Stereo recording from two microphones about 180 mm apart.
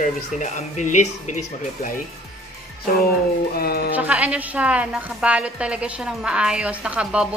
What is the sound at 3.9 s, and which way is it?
A woman's voice, 10° right (ahead or behind).